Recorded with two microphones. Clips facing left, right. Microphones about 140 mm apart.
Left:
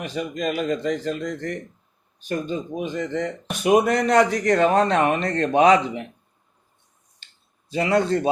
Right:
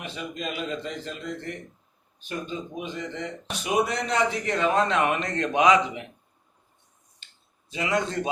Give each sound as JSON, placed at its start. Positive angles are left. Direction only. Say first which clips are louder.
{"t": 0.0, "sound": "speech", "louder": "left 7 dB", "side_deg": 45}
{"t": 7.7, "sound": "a man's voice", "louder": "left 7 dB", "side_deg": 35}